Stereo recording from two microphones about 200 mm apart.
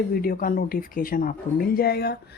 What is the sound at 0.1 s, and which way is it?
Speech, 50° left (ahead or behind).